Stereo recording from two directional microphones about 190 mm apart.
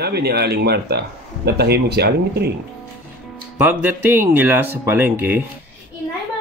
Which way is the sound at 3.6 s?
10° right (ahead or behind).